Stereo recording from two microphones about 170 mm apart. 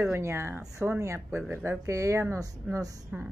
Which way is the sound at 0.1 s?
15° right (ahead or behind).